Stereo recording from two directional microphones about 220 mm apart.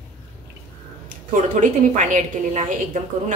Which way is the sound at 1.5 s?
35° right (ahead or behind).